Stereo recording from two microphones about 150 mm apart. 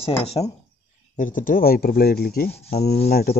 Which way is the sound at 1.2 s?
60° left (ahead or behind).